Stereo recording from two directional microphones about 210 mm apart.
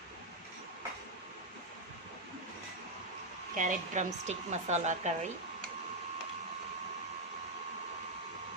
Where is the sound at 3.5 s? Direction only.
35° right (ahead or behind).